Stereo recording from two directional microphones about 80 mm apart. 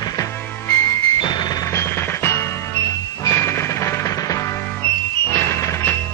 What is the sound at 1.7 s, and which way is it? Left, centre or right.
Music, left.